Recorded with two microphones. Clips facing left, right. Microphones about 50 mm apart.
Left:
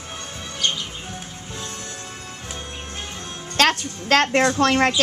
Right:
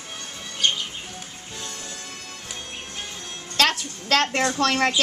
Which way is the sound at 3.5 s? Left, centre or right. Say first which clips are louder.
Left 3 dB; left.